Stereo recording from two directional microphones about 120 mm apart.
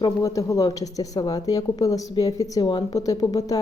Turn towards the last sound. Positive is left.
turn(degrees=30)  # may be behind; listen again after turning